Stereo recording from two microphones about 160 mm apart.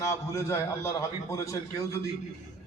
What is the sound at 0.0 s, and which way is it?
A man's voice, 20° left (ahead or behind).